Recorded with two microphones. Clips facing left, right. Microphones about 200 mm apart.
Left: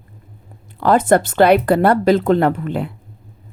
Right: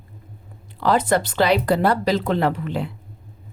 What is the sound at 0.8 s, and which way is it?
Speech, 50° left (ahead or behind).